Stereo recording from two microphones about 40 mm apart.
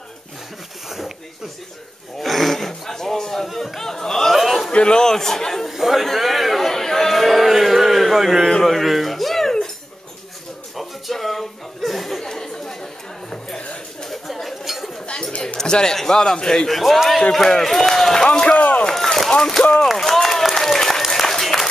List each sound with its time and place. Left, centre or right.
0.8 s speech: centre
2.2 s speech: centre
4.3 s a man's voice: centre
4.7 s speech: left
5.7 s a man's voice: centre
8.5 s speech: centre
10.8 s chuckle: centre
14.0 s chatter: centre
15.4 s a man's voice: centre
16.6 s a man's voice: centre
18.6 s rowboat: left
19.9 s a sound: centre
20.5 s applause: centre
21.1 s a sound: centre